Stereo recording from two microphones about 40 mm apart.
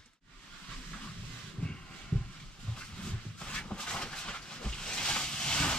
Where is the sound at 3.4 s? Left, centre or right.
Left.